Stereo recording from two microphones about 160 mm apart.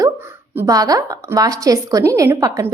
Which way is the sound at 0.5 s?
20° right (ahead or behind).